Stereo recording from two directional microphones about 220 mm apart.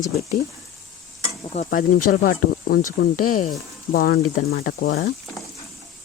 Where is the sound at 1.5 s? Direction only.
35° left (ahead or behind).